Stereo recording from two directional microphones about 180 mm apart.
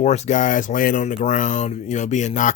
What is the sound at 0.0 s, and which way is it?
Speech, 40° left (ahead or behind).